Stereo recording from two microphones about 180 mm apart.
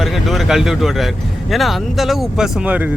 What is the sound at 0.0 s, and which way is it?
Speech, centre (ahead or behind).